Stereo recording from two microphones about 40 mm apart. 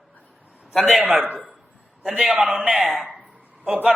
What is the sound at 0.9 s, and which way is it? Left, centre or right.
Speech, centre.